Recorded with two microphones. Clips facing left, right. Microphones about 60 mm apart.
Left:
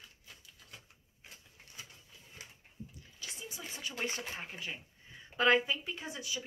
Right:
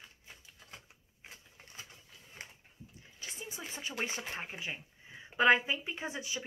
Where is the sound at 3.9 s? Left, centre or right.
Centre.